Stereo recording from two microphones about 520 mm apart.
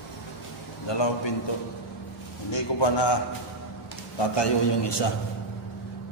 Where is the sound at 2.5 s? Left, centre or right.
Left.